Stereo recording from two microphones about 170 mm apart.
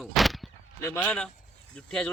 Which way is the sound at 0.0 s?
Centre (ahead or behind).